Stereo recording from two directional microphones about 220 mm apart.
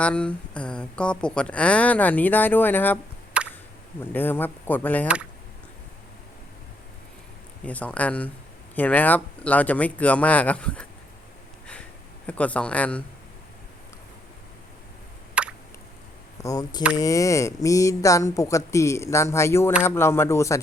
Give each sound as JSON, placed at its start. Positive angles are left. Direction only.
{"t": 0.0, "sound": "speech", "side_deg": 5}
{"t": 3.3, "sound": "a sound", "side_deg": -5}
{"t": 4.0, "sound": "speech", "side_deg": 10}
{"t": 7.6, "sound": "speech", "side_deg": 5}
{"t": 12.2, "sound": "speech", "side_deg": 5}
{"t": 15.4, "sound": "a sound", "side_deg": -5}
{"t": 16.4, "sound": "speech", "side_deg": 15}